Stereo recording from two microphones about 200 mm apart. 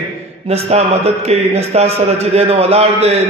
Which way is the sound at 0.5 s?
30° right (ahead or behind).